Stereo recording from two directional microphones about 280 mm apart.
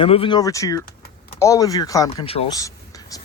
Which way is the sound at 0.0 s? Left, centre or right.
Centre.